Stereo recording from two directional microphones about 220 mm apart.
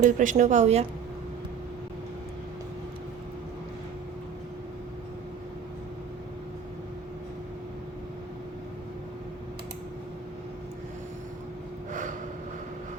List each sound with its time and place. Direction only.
0.0 s a woman's voice: 35° right (ahead or behind)
11.9 s vehicle: 35° right (ahead or behind)